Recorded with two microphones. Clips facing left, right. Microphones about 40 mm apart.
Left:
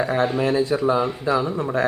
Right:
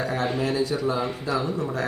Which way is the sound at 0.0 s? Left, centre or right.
Left.